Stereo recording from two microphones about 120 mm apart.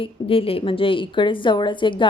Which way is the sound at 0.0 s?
50° left (ahead or behind).